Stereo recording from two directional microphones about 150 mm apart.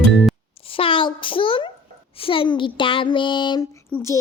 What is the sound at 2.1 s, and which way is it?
Speech, 35° left (ahead or behind).